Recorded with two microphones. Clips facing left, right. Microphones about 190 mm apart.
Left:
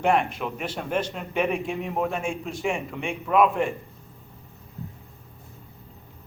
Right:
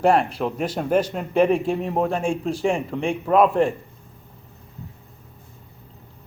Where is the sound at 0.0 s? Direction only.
35° right (ahead or behind).